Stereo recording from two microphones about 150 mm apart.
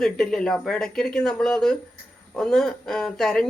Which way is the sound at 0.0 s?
5° left (ahead or behind).